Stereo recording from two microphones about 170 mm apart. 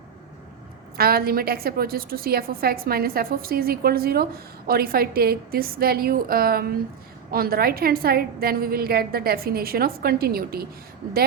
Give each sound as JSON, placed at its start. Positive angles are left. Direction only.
{"t": 0.9, "sound": "a woman's voice", "side_deg": -65}